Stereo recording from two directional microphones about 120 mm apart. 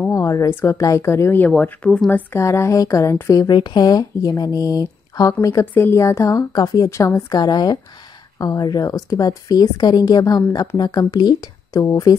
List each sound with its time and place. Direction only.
0.1 s speech: 25° left (ahead or behind)
1.6 s speech: 10° left (ahead or behind)
2.0 s a woman's voice: 20° left (ahead or behind)